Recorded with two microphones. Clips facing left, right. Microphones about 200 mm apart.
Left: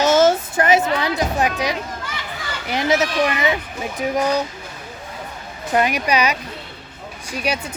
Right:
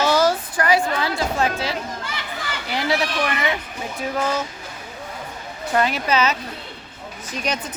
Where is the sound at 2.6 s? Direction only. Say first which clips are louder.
Left 4 dB; 20° left (ahead or behind).